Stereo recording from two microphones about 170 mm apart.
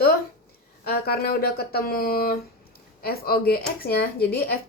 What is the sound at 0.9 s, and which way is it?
A woman's voice, 65° left (ahead or behind).